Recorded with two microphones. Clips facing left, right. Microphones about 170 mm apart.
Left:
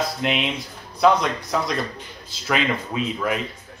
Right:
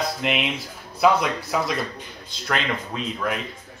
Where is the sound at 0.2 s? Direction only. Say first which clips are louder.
Left 1 dB; centre (ahead or behind).